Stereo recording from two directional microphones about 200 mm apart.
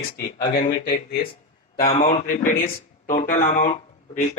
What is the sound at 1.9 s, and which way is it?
Speech, 45° left (ahead or behind).